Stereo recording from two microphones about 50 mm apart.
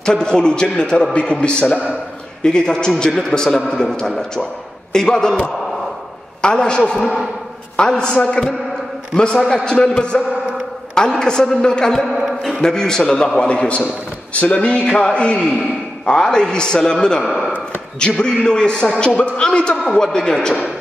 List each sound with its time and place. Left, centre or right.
0.0 s a man's voice: centre
17.2 s speech: centre
17.9 s a man's voice: centre